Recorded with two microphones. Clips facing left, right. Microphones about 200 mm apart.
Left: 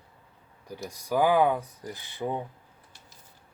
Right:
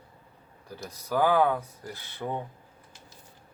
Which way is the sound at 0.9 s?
15° left (ahead or behind).